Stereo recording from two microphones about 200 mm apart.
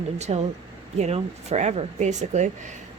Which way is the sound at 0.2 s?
35° right (ahead or behind).